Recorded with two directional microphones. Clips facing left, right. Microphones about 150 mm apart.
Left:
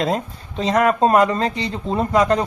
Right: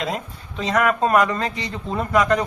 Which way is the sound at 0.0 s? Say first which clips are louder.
Left 5 dB; 35° left (ahead or behind).